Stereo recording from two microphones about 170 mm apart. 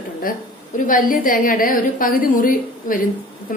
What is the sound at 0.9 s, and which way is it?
A woman's voice, 55° left (ahead or behind).